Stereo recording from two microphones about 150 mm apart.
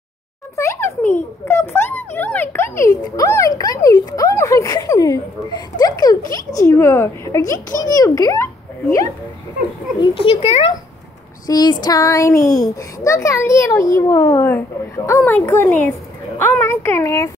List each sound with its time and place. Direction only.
0.6 s a sound: 20° left (ahead or behind)
1.5 s speech: 15° left (ahead or behind)
9.9 s a child's voice: 35° left (ahead or behind)
11.4 s speech: 25° left (ahead or behind)